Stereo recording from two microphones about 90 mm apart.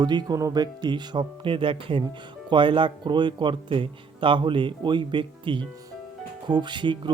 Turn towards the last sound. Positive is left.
turn(degrees=-60)  # may be behind; listen again after turning